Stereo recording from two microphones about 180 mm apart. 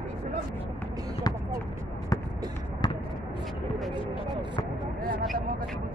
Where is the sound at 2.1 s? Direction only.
20° left (ahead or behind).